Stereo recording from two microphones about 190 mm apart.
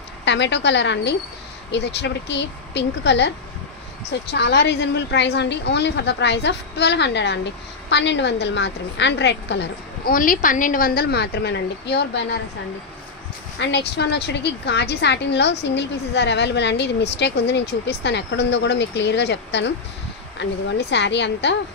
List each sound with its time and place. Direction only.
0.2 s a woman's voice: 65° left (ahead or behind)
4.3 s a woman's voice: 60° left (ahead or behind)
10.1 s a woman's voice: 45° left (ahead or behind); by 12.2 s 60° left (ahead or behind)
13.6 s a woman's voice: 65° left (ahead or behind)